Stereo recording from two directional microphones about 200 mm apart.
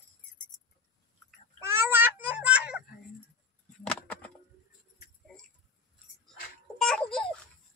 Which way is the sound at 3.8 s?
5° left (ahead or behind).